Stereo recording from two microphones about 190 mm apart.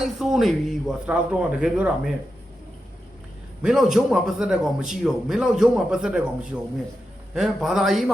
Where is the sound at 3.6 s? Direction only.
5° right (ahead or behind).